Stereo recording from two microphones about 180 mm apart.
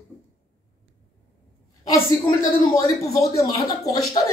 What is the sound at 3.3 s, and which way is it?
Speech, 20° left (ahead or behind).